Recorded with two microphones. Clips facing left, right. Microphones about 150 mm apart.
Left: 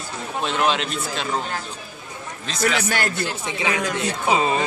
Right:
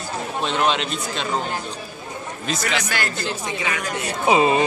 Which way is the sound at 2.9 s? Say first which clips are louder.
Left 2 dB; 55° left (ahead or behind).